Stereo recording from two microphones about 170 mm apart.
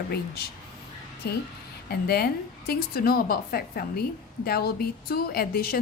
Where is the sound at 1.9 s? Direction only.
65° left (ahead or behind).